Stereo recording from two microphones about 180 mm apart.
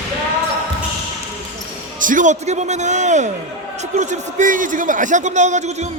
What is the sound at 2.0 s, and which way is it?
A man's voice, 45° right (ahead or behind).